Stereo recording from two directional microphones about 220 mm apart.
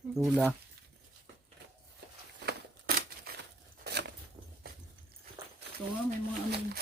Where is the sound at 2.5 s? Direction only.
45° right (ahead or behind).